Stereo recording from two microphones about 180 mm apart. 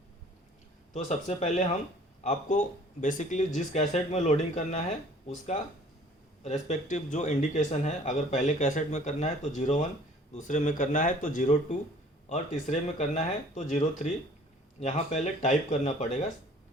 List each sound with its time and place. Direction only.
0.9 s speech: 40° left (ahead or behind)